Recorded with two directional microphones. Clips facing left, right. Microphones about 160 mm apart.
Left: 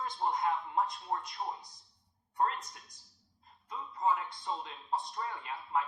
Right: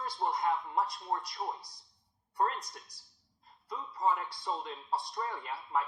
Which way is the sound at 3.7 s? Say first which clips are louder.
Right 1 dB; 35° right (ahead or behind).